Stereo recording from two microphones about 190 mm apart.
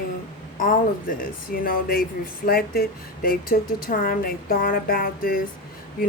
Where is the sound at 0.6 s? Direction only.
45° left (ahead or behind).